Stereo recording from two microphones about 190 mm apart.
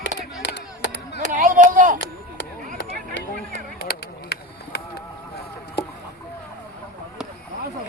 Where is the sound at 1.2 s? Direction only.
45° right (ahead or behind).